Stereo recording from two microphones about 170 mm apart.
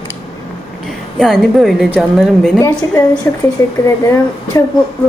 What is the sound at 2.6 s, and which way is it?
A woman's voice, 20° left (ahead or behind).